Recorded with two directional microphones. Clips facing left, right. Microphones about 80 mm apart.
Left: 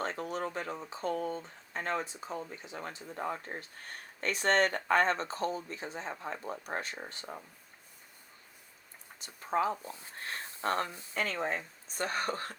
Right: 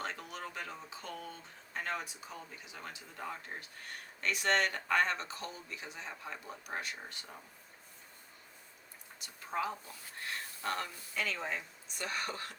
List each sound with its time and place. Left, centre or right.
0.0 s speech: left
9.1 s speech: left